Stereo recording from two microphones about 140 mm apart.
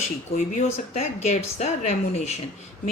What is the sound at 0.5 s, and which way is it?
A woman's voice, 55° left (ahead or behind).